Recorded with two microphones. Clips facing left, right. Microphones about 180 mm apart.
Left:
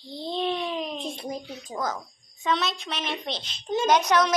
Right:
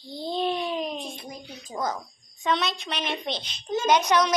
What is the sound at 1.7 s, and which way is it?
A woman's voice, centre (ahead or behind).